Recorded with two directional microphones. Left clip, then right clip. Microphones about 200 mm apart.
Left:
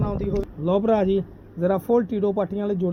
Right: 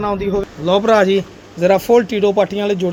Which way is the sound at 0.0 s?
10° right (ahead or behind).